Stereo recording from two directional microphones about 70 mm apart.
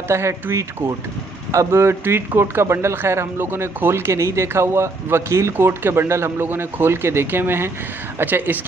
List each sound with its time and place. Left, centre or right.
0.1 s speech: right